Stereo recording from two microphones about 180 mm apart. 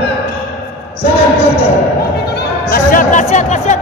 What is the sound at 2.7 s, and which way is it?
Speech, 45° left (ahead or behind).